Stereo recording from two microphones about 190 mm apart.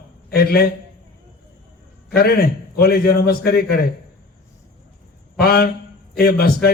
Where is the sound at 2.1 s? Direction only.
55° left (ahead or behind).